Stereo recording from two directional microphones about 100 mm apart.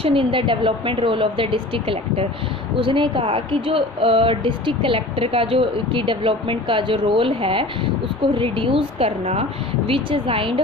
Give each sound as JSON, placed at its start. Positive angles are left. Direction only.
{"t": 0.0, "sound": "speech", "side_deg": -60}
{"t": 9.8, "sound": "speech", "side_deg": -65}